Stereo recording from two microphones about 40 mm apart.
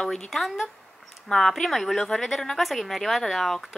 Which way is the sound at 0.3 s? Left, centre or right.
Centre.